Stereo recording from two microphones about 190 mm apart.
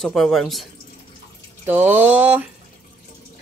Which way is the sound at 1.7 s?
10° right (ahead or behind).